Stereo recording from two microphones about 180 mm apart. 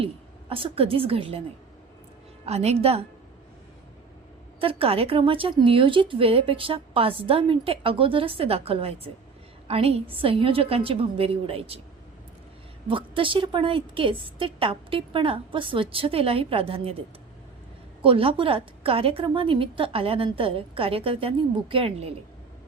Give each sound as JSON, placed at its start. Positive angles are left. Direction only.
{"t": 0.0, "sound": "a woman's voice", "side_deg": -30}
{"t": 2.5, "sound": "a woman's voice", "side_deg": -35}
{"t": 4.6, "sound": "a woman's voice", "side_deg": -30}
{"t": 12.9, "sound": "a woman's voice", "side_deg": -30}
{"t": 18.0, "sound": "a woman's voice", "side_deg": -30}